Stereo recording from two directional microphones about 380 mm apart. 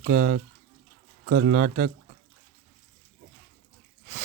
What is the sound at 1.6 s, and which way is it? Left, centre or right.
Speech, right.